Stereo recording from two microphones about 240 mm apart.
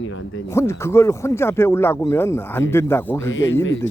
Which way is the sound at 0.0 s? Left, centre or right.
Left.